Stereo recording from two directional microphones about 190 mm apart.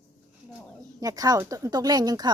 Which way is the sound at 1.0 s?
20° right (ahead or behind).